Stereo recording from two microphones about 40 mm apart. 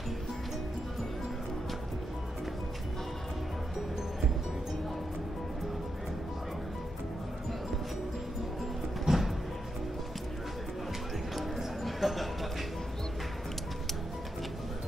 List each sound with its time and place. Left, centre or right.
9.0 s music: centre
11.3 s music: centre